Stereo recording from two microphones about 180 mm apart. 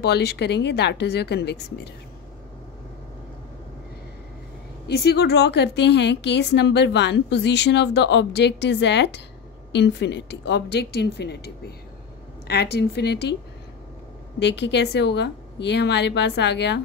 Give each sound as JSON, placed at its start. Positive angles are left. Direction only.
{"t": 0.0, "sound": "a woman's voice", "side_deg": 65}
{"t": 4.8, "sound": "a woman's voice", "side_deg": 65}
{"t": 14.4, "sound": "a woman's voice", "side_deg": 75}